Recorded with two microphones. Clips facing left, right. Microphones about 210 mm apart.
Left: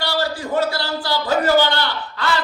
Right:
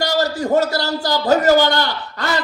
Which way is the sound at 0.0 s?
45° right (ahead or behind).